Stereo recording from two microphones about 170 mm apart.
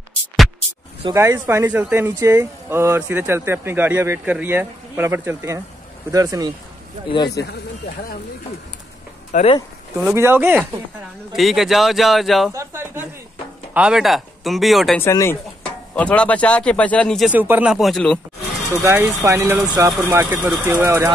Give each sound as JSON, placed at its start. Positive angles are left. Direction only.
{"t": 1.1, "sound": "speech", "side_deg": -15}
{"t": 7.2, "sound": "speech", "side_deg": 75}
{"t": 9.3, "sound": "speech", "side_deg": 45}
{"t": 10.0, "sound": "speech", "side_deg": -15}
{"t": 11.3, "sound": "speech", "side_deg": 0}
{"t": 12.5, "sound": "a sound", "side_deg": -15}
{"t": 13.7, "sound": "speech", "side_deg": -5}
{"t": 15.0, "sound": "speech", "side_deg": 15}
{"t": 17.3, "sound": "speech", "side_deg": -10}
{"t": 18.7, "sound": "speech", "side_deg": -15}